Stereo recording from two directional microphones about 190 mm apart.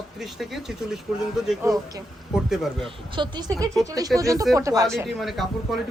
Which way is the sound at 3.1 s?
25° right (ahead or behind).